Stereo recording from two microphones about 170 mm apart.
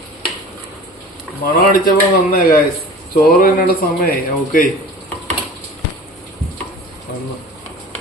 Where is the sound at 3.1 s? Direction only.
55° left (ahead or behind).